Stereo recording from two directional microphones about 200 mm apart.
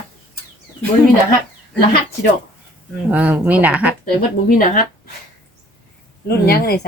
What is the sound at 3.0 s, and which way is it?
Speech, 10° right (ahead or behind).